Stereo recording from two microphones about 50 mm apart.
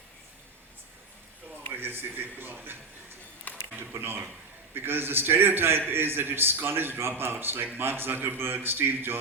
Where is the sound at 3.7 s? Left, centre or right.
Right.